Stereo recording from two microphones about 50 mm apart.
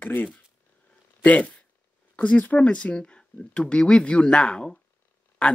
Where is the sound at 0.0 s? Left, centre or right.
Left.